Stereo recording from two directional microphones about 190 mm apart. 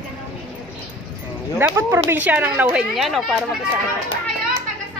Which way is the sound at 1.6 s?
10° right (ahead or behind).